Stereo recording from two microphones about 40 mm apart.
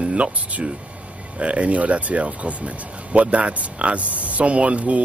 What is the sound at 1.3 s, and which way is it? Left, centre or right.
Speech, right.